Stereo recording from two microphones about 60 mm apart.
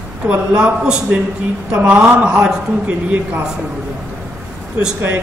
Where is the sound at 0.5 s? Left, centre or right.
Centre.